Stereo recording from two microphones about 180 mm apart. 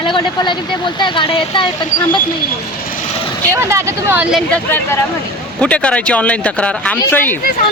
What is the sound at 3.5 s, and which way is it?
Speech, 15° right (ahead or behind).